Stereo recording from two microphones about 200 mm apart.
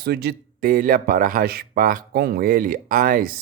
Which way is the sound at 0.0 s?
55° right (ahead or behind).